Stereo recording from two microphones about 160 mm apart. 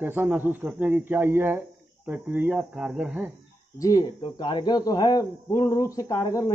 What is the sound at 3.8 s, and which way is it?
Speech, 20° left (ahead or behind).